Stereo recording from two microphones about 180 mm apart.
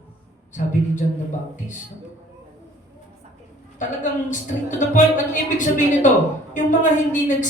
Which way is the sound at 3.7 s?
45° left (ahead or behind).